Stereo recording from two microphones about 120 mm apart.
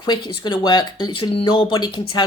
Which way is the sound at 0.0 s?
40° left (ahead or behind).